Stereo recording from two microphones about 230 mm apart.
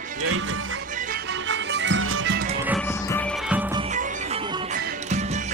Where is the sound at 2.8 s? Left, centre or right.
Centre.